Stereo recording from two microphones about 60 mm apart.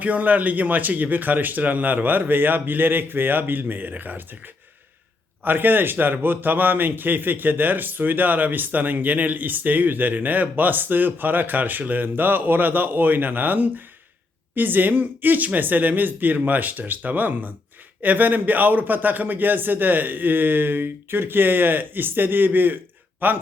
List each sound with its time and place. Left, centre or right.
0.0 s speech: right
5.4 s a man's voice: right